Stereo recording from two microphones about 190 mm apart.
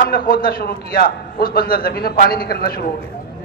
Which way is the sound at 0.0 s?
50° left (ahead or behind).